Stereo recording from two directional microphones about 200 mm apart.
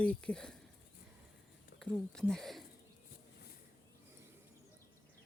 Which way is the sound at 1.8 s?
5° left (ahead or behind).